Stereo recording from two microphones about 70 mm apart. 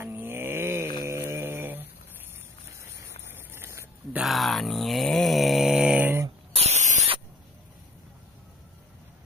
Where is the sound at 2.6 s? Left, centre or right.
Right.